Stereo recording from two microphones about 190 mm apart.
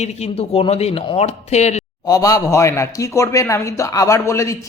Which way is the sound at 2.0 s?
20° left (ahead or behind).